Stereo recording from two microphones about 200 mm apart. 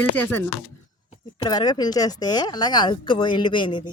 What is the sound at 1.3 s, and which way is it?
Speech, 20° left (ahead or behind).